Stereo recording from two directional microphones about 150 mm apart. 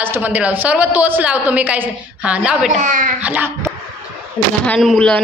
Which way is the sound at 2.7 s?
55° right (ahead or behind).